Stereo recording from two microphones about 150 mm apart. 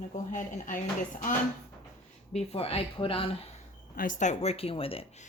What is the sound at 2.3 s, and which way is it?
Speech, 40° left (ahead or behind).